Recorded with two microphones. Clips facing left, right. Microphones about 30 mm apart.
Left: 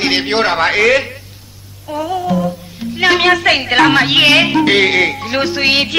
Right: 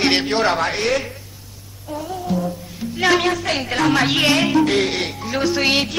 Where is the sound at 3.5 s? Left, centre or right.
Left.